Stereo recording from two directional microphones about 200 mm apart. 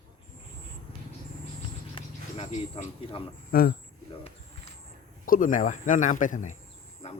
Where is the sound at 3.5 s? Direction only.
45° left (ahead or behind).